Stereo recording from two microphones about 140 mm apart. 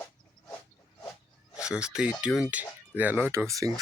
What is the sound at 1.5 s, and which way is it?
Speech, 5° right (ahead or behind).